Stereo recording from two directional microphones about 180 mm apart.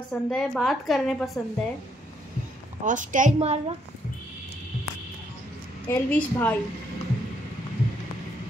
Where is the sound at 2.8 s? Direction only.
45° right (ahead or behind).